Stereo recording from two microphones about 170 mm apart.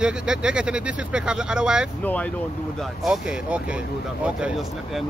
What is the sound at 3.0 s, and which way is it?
Speech, 5° right (ahead or behind).